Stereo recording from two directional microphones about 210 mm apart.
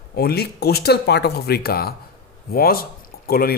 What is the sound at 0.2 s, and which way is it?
Speech, 50° left (ahead or behind).